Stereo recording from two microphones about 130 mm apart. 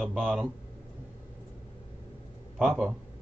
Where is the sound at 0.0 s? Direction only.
Centre (ahead or behind).